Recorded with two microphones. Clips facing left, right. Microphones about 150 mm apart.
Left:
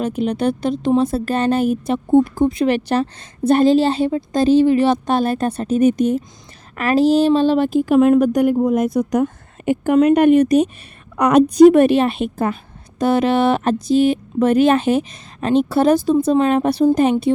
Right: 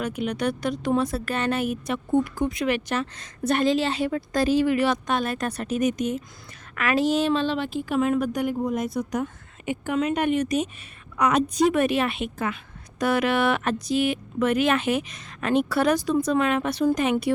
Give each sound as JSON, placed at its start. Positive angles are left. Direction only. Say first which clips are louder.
{"t": 0.0, "sound": "speech", "louder": "left 7 dB", "side_deg": 30}
{"t": 8.5, "sound": "speech", "louder": "left 9 dB", "side_deg": 75}
{"t": 8.8, "sound": "speech", "louder": "left 9 dB", "side_deg": 45}
{"t": 10.0, "sound": "speech", "louder": "left 12 dB", "side_deg": 50}
{"t": 11.2, "sound": "speech", "louder": "left 9 dB", "side_deg": 70}
{"t": 11.4, "sound": "speech", "louder": "left 12 dB", "side_deg": 35}